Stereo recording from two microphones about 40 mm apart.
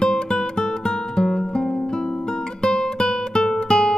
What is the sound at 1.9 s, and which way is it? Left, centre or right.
Guitar, centre.